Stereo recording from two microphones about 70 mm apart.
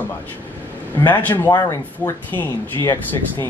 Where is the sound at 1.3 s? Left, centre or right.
Left.